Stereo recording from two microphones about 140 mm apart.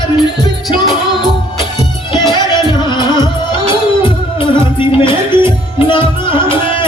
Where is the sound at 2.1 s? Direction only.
30° left (ahead or behind).